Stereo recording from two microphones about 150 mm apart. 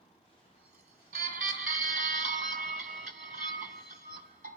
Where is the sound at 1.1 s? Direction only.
70° right (ahead or behind).